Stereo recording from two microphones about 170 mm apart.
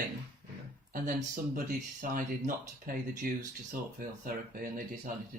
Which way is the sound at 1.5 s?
55° right (ahead or behind).